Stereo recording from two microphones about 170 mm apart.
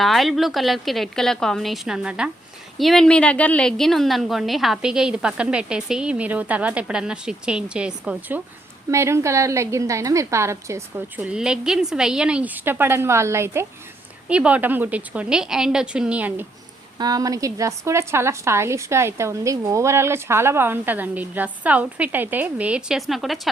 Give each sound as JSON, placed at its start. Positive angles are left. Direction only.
{"t": 0.0, "sound": "a woman's voice", "side_deg": 0}
{"t": 8.9, "sound": "a woman's voice", "side_deg": -15}
{"t": 11.2, "sound": "a woman's voice", "side_deg": -5}
{"t": 17.0, "sound": "a woman's voice", "side_deg": -20}